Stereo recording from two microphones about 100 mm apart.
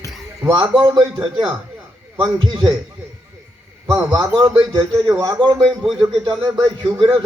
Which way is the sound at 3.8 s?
30° right (ahead or behind).